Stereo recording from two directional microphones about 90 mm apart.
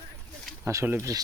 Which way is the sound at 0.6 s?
30° right (ahead or behind).